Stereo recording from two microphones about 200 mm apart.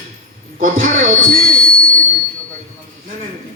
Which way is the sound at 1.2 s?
45° right (ahead or behind).